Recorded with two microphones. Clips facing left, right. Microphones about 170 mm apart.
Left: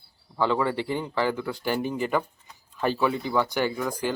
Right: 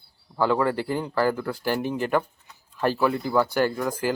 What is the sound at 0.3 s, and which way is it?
A man's voice, 5° right (ahead or behind).